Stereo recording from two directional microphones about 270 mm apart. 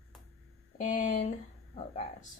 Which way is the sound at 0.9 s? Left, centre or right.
Left.